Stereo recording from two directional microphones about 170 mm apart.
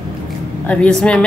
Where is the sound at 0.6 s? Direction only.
10° left (ahead or behind).